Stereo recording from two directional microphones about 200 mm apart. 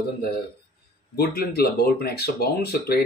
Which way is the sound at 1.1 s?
50° left (ahead or behind).